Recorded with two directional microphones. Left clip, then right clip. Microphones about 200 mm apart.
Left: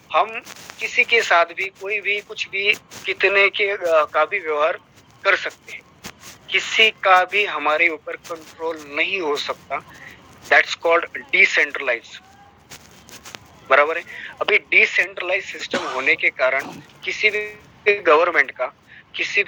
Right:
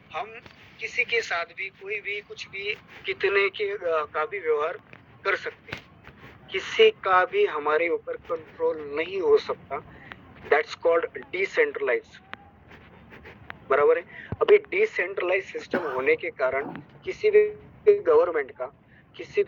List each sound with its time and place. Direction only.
0.1 s speech: 35° left (ahead or behind)
13.7 s speech: 45° left (ahead or behind)
19.1 s speech: centre (ahead or behind)